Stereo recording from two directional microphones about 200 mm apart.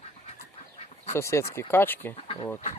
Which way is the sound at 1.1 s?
15° left (ahead or behind).